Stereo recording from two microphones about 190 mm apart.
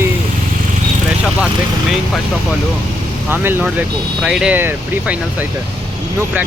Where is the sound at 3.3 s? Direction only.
10° right (ahead or behind).